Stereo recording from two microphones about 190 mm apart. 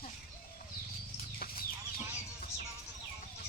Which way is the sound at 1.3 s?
50° left (ahead or behind).